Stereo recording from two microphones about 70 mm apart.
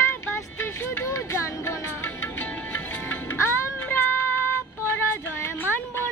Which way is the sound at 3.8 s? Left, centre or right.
Left.